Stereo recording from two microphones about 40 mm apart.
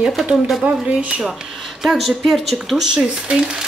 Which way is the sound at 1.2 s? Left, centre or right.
Centre.